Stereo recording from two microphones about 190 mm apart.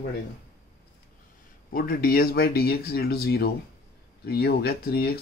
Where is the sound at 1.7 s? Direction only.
50° left (ahead or behind).